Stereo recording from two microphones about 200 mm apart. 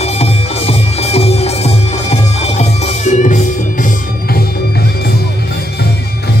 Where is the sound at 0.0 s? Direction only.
30° left (ahead or behind).